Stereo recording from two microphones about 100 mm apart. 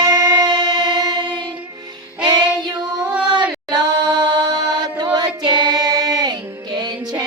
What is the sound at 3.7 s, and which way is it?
Music, 45° right (ahead or behind).